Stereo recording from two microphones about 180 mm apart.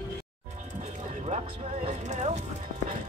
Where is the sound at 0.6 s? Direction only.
40° right (ahead or behind).